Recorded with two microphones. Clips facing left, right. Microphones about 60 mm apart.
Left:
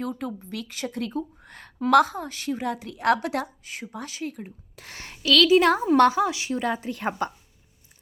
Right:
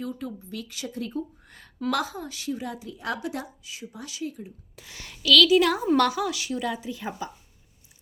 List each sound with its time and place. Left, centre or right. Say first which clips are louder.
0.0 s speech: left 3 dB; left
0.7 s speech: left 4 dB; left
0.9 s a woman's voice: left 1 dB; left
3.6 s speech: left 4 dB; left
5.0 s a woman's voice: even; left